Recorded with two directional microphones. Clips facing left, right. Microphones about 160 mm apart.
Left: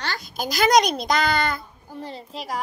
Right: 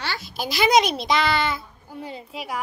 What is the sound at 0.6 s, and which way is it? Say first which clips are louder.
A woman's voice: left 1 dB; 5° right (ahead or behind).